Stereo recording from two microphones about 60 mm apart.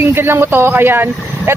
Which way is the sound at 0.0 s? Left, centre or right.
Right.